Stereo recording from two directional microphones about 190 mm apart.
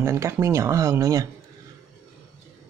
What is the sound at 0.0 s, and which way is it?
Speech, 15° right (ahead or behind).